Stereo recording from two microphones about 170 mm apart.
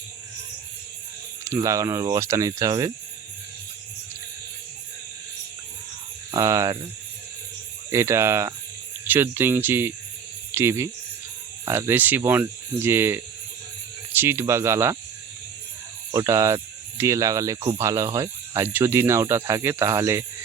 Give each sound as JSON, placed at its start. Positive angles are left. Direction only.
{"t": 1.5, "sound": "speech", "side_deg": -20}
{"t": 6.3, "sound": "speech", "side_deg": -20}
{"t": 7.9, "sound": "speech", "side_deg": -15}
{"t": 16.1, "sound": "speech", "side_deg": -20}